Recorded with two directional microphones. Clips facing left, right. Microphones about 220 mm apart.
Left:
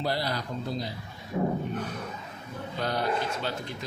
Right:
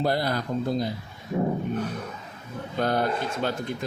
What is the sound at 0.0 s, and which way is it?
Speech, 50° right (ahead or behind).